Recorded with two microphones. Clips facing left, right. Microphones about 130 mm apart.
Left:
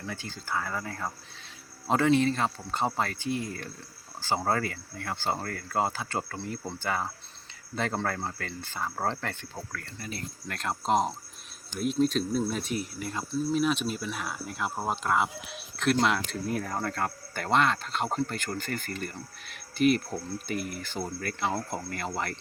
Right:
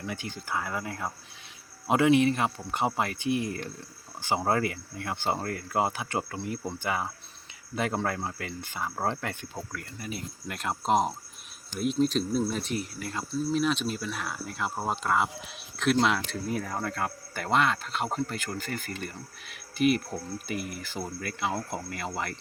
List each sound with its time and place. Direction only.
0.0 s speech: 15° right (ahead or behind)